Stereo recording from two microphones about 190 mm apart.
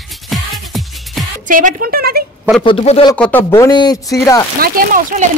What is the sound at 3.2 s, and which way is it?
Speech, 10° left (ahead or behind).